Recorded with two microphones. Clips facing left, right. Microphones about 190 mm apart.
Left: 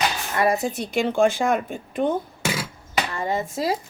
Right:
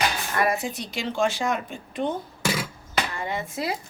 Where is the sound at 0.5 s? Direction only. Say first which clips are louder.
Left 6 dB; 45° left (ahead or behind).